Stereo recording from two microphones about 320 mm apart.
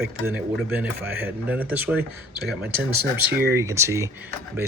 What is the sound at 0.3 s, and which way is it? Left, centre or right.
Speech, centre.